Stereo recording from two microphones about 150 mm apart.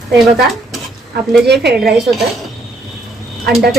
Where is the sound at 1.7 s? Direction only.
Centre (ahead or behind).